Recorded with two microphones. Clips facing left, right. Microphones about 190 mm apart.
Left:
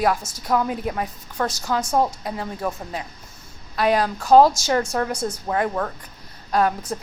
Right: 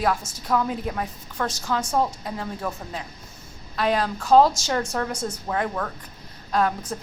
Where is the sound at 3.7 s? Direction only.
10° left (ahead or behind).